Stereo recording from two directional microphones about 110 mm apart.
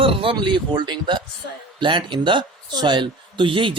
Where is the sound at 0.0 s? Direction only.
55° right (ahead or behind).